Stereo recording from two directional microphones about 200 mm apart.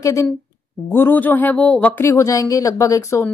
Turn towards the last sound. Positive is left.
turn(degrees=15)  # may be behind; listen again after turning